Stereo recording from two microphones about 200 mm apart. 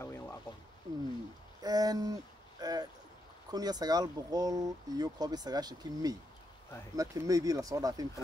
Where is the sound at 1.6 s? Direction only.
20° right (ahead or behind).